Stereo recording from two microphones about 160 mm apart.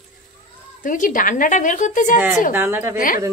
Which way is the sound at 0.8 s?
55° left (ahead or behind).